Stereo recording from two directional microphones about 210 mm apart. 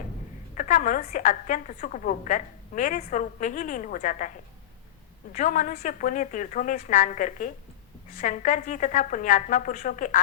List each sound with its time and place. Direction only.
0.5 s a woman's voice: 35° left (ahead or behind)
5.3 s a woman's voice: 35° left (ahead or behind)